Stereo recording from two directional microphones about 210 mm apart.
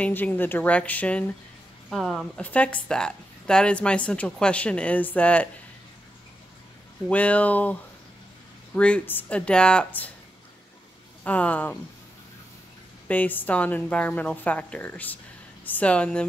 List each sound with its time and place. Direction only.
0.0 s a woman's voice: 10° left (ahead or behind)
7.1 s a woman's voice: 5° left (ahead or behind)
11.2 s a woman's voice: 5° left (ahead or behind)
13.1 s a woman's voice: 10° left (ahead or behind)